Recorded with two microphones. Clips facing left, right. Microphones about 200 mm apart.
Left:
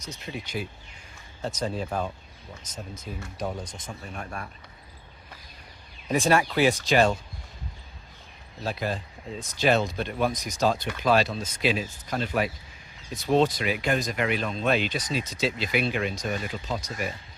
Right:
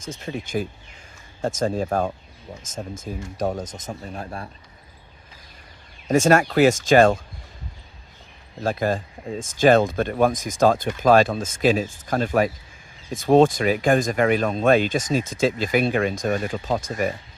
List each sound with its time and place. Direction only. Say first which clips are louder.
0.0 s speech: right 6 dB; 50° right (ahead or behind); by 4.4 s 30° right (ahead or behind)
6.1 s speech: right 6 dB; 45° right (ahead or behind)
8.6 s speech: right 7 dB; 45° right (ahead or behind)